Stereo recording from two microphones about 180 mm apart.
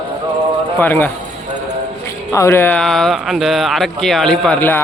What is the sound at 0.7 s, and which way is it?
Speech, 10° left (ahead or behind).